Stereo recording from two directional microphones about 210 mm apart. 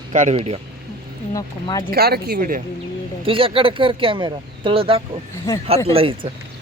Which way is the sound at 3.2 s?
25° right (ahead or behind).